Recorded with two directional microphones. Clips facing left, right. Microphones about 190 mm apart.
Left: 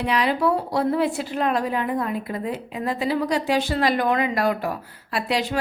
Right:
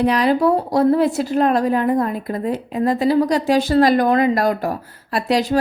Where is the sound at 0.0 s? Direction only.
40° right (ahead or behind).